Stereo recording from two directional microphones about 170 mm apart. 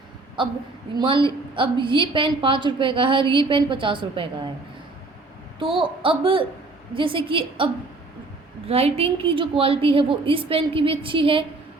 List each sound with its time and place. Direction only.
0.4 s a woman's voice: 30° right (ahead or behind)
5.5 s a woman's voice: 30° right (ahead or behind)